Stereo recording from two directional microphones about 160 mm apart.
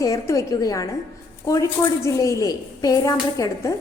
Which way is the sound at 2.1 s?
20° left (ahead or behind).